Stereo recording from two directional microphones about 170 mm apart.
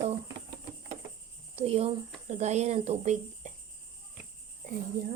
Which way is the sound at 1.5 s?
35° right (ahead or behind).